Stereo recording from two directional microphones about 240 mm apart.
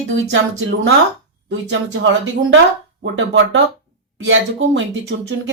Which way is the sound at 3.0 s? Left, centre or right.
Right.